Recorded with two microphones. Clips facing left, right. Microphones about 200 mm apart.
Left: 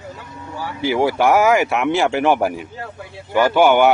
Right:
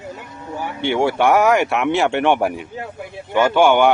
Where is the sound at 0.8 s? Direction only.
Centre (ahead or behind).